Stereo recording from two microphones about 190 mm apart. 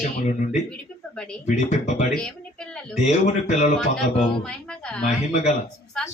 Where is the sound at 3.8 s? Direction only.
Centre (ahead or behind).